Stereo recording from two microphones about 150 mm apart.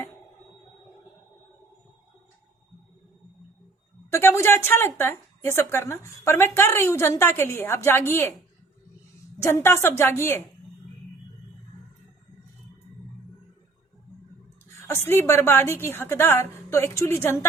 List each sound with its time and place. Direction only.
4.1 s a woman's voice: 20° left (ahead or behind)
9.4 s a woman's voice: 15° left (ahead or behind)
14.8 s a woman's voice: 15° left (ahead or behind)